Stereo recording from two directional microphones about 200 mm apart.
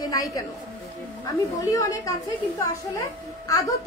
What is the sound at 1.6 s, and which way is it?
A woman's voice, 15° left (ahead or behind).